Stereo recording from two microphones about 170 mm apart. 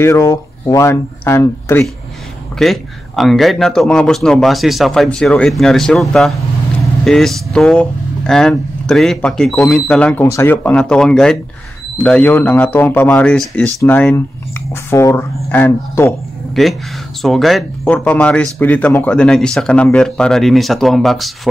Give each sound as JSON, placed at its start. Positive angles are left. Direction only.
{"t": 0.0, "sound": "speech", "side_deg": 15}
{"t": 2.6, "sound": "a man's voice", "side_deg": 0}
{"t": 16.6, "sound": "a man's voice", "side_deg": 0}